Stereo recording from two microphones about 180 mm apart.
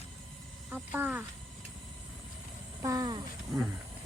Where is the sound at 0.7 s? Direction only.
10° right (ahead or behind).